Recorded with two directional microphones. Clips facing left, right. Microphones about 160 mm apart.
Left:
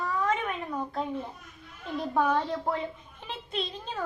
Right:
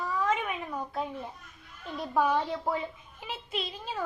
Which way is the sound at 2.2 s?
5° right (ahead or behind).